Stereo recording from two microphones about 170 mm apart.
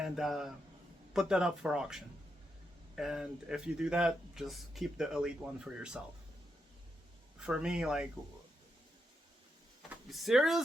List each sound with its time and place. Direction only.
0.2 s speech: centre (ahead or behind)
7.4 s speech: 5° right (ahead or behind)
9.9 s speech: centre (ahead or behind)